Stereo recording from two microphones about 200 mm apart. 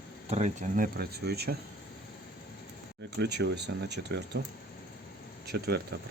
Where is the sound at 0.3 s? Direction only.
35° right (ahead or behind); by 1.5 s 55° right (ahead or behind).